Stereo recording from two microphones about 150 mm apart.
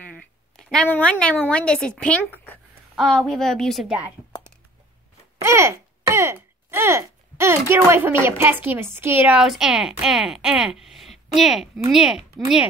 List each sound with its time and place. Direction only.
0.6 s a woman's voice: 5° left (ahead or behind)
5.4 s a woman's voice: 20° right (ahead or behind)